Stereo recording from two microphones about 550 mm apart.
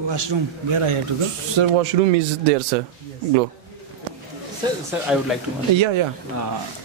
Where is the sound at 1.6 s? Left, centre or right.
Right.